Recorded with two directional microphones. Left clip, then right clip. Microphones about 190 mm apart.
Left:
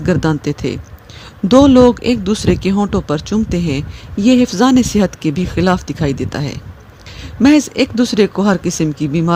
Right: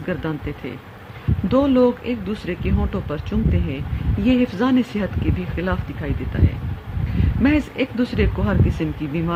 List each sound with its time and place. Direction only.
0.0 s speech: 55° left (ahead or behind)
7.4 s speech: 55° left (ahead or behind)